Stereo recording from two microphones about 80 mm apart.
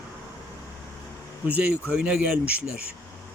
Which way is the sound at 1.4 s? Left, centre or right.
Centre.